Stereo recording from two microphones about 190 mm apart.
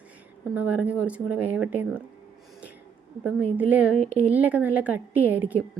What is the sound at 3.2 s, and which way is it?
A woman's voice, 10° right (ahead or behind).